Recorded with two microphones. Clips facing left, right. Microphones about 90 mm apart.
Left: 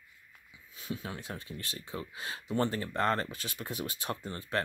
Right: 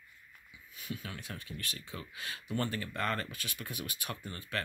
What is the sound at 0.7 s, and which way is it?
Speech, 25° left (ahead or behind).